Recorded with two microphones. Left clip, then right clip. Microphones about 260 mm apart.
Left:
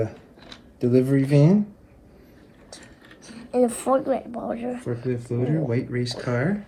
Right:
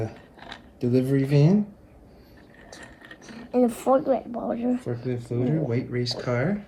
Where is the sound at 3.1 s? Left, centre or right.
Right.